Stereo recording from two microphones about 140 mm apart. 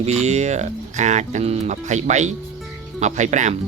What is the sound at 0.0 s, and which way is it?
Speech, 50° right (ahead or behind).